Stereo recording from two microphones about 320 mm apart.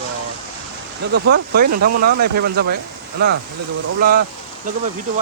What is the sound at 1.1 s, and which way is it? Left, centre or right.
Speech, right.